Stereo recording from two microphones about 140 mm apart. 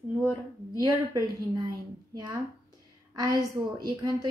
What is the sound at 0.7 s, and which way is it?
Speech, 30° right (ahead or behind).